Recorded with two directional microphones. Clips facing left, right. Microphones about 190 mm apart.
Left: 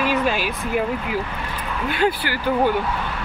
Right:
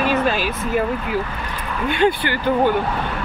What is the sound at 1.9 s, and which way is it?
Speech, 5° left (ahead or behind).